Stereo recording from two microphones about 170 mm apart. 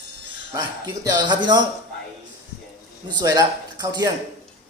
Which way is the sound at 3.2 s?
20° right (ahead or behind).